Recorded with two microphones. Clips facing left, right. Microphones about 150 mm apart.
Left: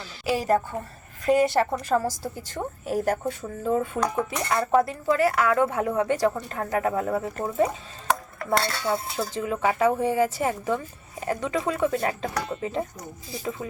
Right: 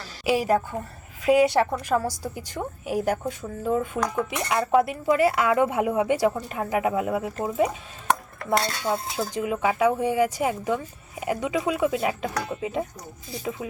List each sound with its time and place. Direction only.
0.3 s speech: 10° right (ahead or behind)
9.1 s speech: 5° right (ahead or behind)